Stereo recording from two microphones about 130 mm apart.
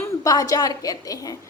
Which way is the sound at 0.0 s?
25° left (ahead or behind).